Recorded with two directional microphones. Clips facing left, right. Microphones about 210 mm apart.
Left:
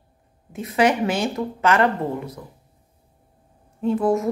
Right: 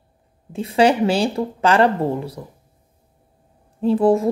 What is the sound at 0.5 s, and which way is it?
A woman's voice, 30° right (ahead or behind).